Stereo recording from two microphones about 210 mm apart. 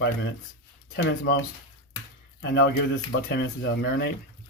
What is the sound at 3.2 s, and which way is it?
Speech, 50° left (ahead or behind).